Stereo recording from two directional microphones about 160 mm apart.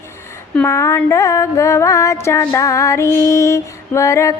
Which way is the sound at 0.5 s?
15° left (ahead or behind).